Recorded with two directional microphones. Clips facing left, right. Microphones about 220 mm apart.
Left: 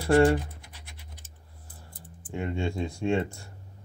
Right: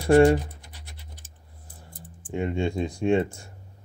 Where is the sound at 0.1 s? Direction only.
15° right (ahead or behind).